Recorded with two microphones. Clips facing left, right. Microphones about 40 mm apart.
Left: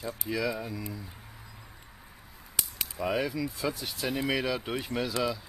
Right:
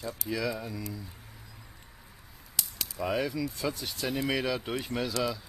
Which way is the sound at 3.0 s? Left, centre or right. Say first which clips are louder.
Even; centre.